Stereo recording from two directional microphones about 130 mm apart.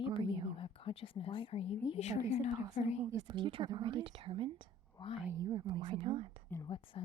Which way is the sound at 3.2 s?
40° right (ahead or behind).